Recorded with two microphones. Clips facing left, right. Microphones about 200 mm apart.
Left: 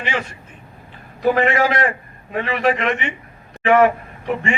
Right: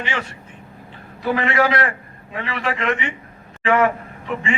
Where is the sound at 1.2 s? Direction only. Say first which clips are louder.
Left 3 dB; 45° left (ahead or behind).